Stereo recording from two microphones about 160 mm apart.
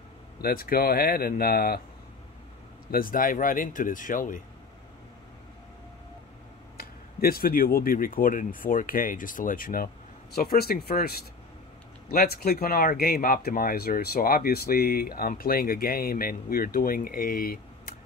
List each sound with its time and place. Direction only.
0.4 s speech: 65° left (ahead or behind)
2.9 s speech: 60° left (ahead or behind)
6.8 s speech: 70° left (ahead or behind)
10.3 s speech: 70° left (ahead or behind)